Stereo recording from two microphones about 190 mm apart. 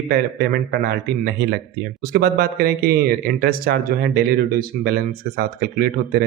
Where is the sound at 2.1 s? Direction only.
55° right (ahead or behind).